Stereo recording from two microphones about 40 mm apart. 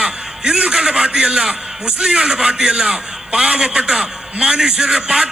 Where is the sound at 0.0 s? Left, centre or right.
Right.